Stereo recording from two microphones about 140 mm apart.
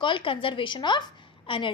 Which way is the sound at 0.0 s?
40° left (ahead or behind).